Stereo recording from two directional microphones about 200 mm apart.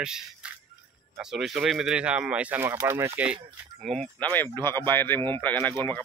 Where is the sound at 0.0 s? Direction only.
5° right (ahead or behind).